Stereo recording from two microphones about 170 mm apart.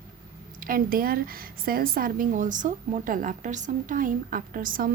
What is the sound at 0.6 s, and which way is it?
A woman's voice, 55° right (ahead or behind).